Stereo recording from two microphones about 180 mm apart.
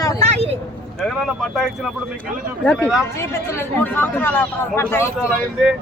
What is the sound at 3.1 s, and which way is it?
Speech, 15° left (ahead or behind).